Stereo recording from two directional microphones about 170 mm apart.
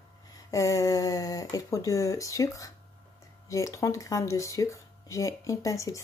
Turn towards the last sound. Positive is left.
turn(degrees=20)  # may be behind; listen again after turning